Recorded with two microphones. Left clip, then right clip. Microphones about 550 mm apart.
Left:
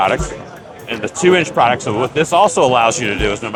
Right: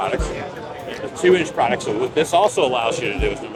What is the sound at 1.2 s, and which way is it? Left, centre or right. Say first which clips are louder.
Speech: left 4 dB; left.